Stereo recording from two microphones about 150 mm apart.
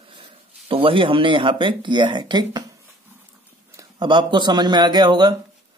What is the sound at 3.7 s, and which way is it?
Speech, 25° right (ahead or behind).